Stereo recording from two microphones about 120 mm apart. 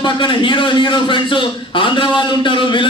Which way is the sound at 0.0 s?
40° left (ahead or behind).